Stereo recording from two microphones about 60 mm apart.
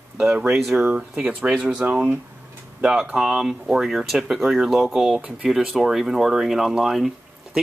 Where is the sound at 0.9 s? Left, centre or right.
Right.